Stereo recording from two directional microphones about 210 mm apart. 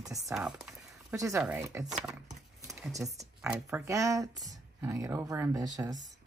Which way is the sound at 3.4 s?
10° right (ahead or behind).